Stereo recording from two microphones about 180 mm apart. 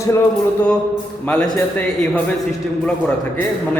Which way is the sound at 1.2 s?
10° left (ahead or behind).